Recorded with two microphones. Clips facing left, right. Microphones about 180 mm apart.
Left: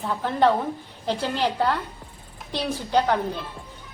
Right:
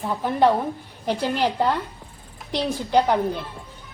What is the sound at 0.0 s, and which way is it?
A woman's voice, 15° right (ahead or behind).